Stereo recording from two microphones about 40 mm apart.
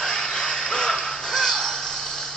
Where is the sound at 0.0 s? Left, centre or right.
Centre.